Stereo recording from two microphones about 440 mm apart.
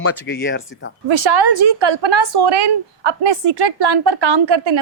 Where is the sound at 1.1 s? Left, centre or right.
Right.